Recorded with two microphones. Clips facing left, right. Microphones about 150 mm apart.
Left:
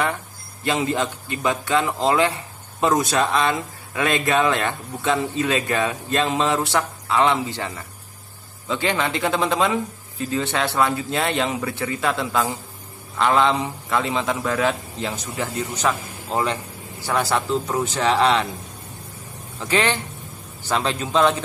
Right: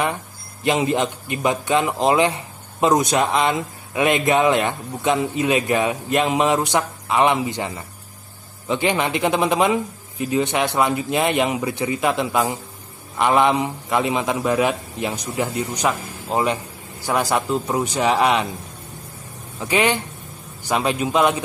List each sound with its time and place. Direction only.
0.7 s a man's voice: 20° right (ahead or behind)
19.6 s speech: 15° right (ahead or behind)